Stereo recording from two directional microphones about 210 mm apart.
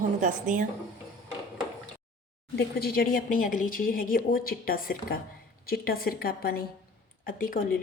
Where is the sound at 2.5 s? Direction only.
45° left (ahead or behind).